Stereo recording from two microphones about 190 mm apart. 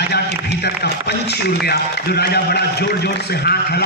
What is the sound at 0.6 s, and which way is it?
A man's voice, 60° left (ahead or behind).